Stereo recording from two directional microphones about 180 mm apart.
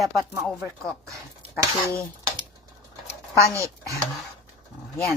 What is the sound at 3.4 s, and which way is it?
Speech, 15° right (ahead or behind).